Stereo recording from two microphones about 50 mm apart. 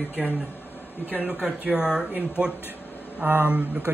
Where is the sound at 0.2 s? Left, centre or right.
Centre.